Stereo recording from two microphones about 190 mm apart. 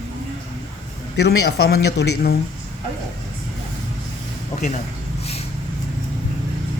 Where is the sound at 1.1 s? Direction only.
60° left (ahead or behind).